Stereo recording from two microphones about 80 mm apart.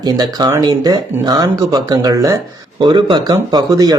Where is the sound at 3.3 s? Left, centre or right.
Right.